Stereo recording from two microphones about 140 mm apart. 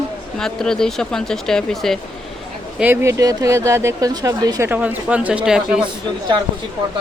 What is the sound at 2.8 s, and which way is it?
Speech, 15° right (ahead or behind).